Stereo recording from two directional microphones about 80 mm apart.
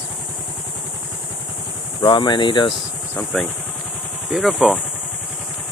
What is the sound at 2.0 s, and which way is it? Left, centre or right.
Speech, left.